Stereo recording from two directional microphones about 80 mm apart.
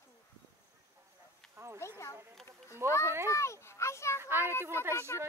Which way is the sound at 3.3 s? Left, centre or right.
Left.